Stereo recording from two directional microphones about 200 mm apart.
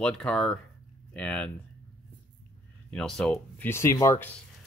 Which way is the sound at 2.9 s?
Centre (ahead or behind).